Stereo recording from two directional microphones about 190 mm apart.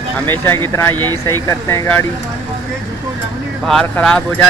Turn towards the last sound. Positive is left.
turn(degrees=5)  # may be behind; listen again after turning